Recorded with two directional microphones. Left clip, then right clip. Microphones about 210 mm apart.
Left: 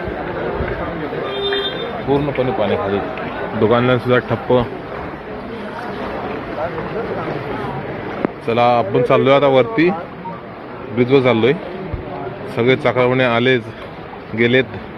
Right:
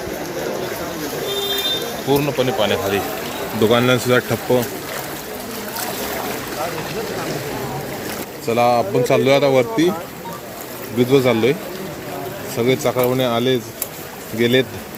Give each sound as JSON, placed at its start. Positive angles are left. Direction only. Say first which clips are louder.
{"t": 2.0, "sound": "a man's voice", "louder": "even", "side_deg": -25}
{"t": 8.4, "sound": "a man's voice", "louder": "left 1 dB", "side_deg": -25}
{"t": 10.9, "sound": "a man's voice", "louder": "left 2 dB", "side_deg": -25}
{"t": 12.5, "sound": "a man's voice", "louder": "left 3 dB", "side_deg": -20}